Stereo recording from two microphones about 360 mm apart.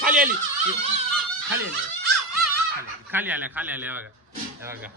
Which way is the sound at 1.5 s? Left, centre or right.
Right.